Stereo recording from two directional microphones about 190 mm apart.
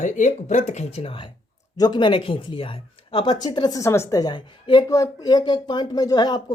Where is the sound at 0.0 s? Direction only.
40° left (ahead or behind).